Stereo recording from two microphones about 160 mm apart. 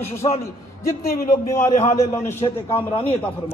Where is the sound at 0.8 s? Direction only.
70° left (ahead or behind).